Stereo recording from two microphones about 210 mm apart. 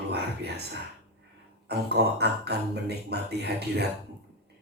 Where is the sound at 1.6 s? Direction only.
50° right (ahead or behind).